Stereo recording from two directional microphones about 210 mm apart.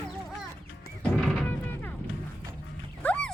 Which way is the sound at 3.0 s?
5° left (ahead or behind).